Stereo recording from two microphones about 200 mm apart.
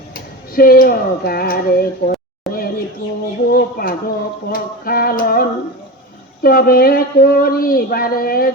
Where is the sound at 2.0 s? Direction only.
45° left (ahead or behind).